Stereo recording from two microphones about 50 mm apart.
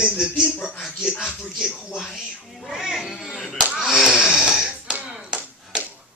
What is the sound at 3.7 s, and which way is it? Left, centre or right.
Snoring, centre.